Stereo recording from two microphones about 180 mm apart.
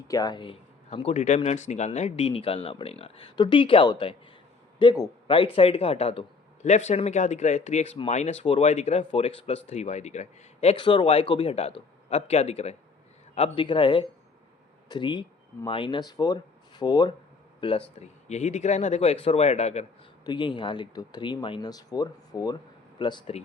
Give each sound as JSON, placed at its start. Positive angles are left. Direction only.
{"t": 0.1, "sound": "speech", "side_deg": 20}
{"t": 20.2, "sound": "speech", "side_deg": 25}